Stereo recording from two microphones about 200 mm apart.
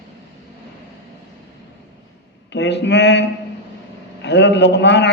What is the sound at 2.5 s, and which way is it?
A man's voice, 60° left (ahead or behind).